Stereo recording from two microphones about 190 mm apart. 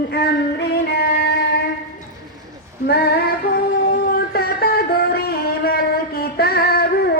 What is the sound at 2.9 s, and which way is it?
Female singing, 55° left (ahead or behind).